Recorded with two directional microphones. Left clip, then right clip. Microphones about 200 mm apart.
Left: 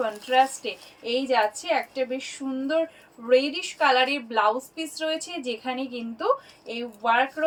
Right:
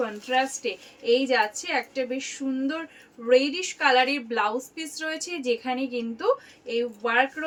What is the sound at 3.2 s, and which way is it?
A woman's voice, 15° right (ahead or behind).